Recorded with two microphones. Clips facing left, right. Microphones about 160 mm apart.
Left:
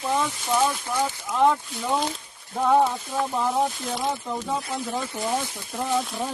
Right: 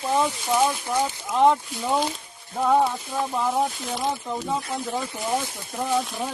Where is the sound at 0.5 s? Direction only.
15° right (ahead or behind).